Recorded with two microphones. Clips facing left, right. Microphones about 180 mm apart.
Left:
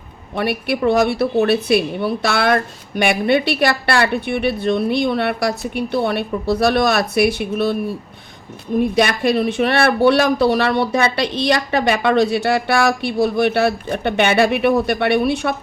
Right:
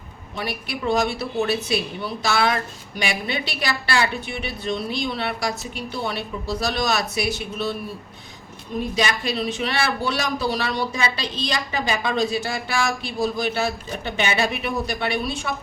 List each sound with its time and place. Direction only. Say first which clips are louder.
0.3 s a woman's voice: left 10 dB; 60° left (ahead or behind)
8.8 s a woman's voice: left 7 dB; 60° left (ahead or behind)